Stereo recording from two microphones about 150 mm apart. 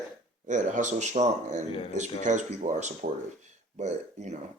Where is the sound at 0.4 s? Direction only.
55° right (ahead or behind).